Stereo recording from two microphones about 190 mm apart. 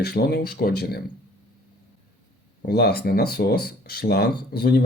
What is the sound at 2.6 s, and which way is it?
Speech, 55° left (ahead or behind).